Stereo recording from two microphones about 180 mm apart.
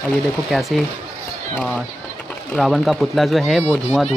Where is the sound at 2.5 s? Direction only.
Centre (ahead or behind).